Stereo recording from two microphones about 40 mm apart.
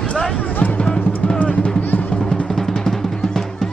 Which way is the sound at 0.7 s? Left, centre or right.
Left.